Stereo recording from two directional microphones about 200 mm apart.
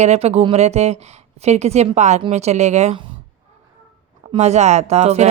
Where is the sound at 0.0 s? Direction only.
30° right (ahead or behind).